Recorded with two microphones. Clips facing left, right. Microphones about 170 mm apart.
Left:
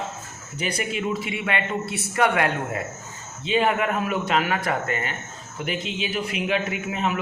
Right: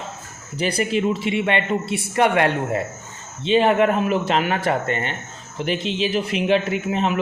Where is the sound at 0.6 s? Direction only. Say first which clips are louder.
Right 6 dB; 30° right (ahead or behind).